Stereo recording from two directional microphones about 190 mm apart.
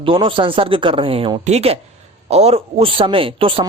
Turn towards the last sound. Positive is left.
turn(degrees=-30)  # may be behind; listen again after turning